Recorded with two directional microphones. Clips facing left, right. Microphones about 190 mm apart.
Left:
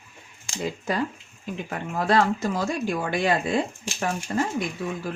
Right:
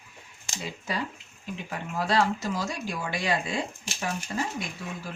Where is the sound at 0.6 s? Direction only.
50° left (ahead or behind).